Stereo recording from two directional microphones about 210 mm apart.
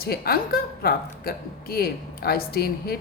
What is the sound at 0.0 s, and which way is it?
A woman's voice, 45° left (ahead or behind).